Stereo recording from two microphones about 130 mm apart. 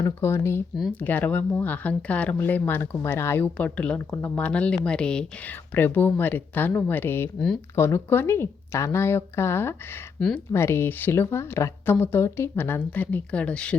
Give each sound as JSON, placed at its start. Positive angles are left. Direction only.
{"t": 0.0, "sound": "speech", "side_deg": 20}
{"t": 10.2, "sound": "speech", "side_deg": 5}
{"t": 10.5, "sound": "speech", "side_deg": 20}